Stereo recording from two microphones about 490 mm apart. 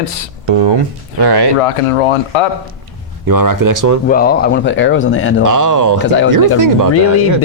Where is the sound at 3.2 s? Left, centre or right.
Right.